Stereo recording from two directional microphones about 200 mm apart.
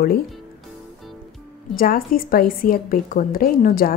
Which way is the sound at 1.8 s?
45° left (ahead or behind).